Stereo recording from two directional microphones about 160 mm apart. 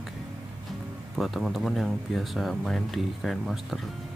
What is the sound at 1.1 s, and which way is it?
Speech, centre (ahead or behind).